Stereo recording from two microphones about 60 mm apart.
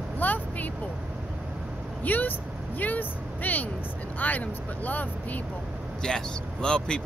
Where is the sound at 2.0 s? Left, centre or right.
Left.